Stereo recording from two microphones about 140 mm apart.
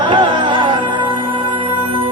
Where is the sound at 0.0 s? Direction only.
35° right (ahead or behind).